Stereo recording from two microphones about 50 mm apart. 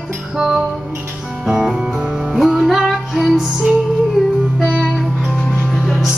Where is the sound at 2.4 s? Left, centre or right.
Centre.